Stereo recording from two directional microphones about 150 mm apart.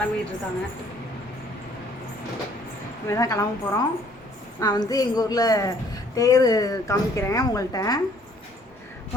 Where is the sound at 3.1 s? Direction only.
25° left (ahead or behind).